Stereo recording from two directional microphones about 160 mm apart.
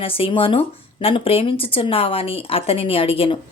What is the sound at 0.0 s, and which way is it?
Speech, 35° left (ahead or behind).